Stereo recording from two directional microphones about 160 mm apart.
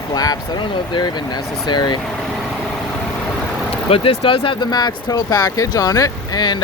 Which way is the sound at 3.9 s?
35° left (ahead or behind).